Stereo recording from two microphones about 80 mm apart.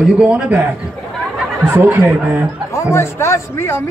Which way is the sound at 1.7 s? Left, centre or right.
Right.